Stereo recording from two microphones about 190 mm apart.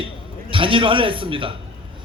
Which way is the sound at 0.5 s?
25° right (ahead or behind).